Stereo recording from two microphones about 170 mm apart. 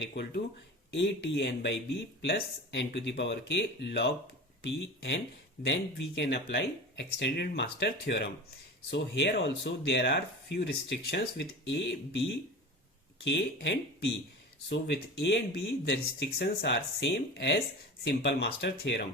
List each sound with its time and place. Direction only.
0.0 s speech: 75° left (ahead or behind)
0.9 s speech: 90° left
5.6 s speech: 65° left (ahead or behind)
6.1 s speech: 85° left
8.9 s speech: 90° left
13.2 s speech: 90° left